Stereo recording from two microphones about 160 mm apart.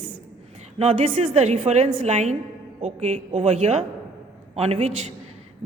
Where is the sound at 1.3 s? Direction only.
45° right (ahead or behind).